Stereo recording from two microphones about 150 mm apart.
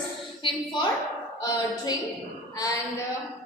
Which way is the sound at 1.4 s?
25° left (ahead or behind).